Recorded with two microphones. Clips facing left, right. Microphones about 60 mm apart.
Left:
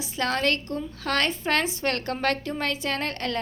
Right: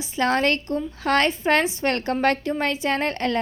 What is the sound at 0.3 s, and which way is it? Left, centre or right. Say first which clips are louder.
A woman's voice: right 4 dB; right.